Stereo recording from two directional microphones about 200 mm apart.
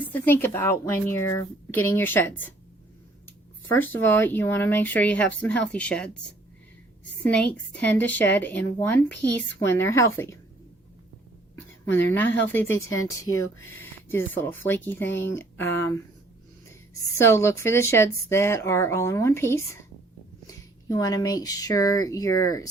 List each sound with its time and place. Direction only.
0.0 s speech: 10° left (ahead or behind)
3.8 s speech: 10° left (ahead or behind)
7.3 s speech: 5° left (ahead or behind)
11.5 s a woman's voice: 10° left (ahead or behind)
13.3 s speech: 15° right (ahead or behind)
13.7 s speech: 10° left (ahead or behind)
17.2 s speech: 15° left (ahead or behind)